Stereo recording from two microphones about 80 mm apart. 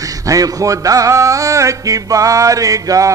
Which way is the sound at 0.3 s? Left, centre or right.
Right.